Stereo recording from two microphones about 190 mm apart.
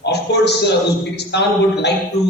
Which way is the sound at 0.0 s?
60° left (ahead or behind).